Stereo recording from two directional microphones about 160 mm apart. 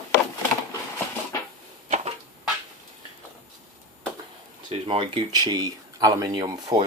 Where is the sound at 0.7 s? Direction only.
20° left (ahead or behind).